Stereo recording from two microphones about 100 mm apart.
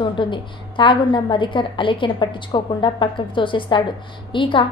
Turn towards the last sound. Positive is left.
turn(degrees=60)  # may be behind; listen again after turning